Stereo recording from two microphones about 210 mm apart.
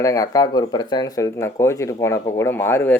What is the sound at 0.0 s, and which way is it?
Speech, 15° left (ahead or behind).